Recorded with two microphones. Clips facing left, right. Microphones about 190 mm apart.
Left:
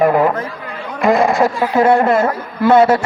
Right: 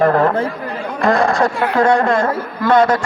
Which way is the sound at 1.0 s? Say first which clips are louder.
Left 2 dB; centre (ahead or behind).